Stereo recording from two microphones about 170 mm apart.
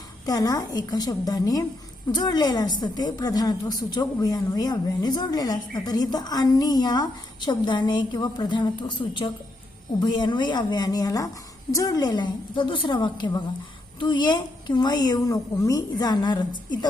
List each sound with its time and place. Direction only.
0.3 s speech: 20° left (ahead or behind)